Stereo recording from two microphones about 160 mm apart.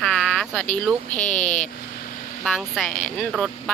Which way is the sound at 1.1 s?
50° left (ahead or behind).